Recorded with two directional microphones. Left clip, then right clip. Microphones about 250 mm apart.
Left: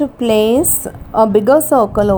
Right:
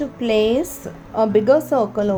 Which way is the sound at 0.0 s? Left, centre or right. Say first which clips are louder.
Left 5 dB; left.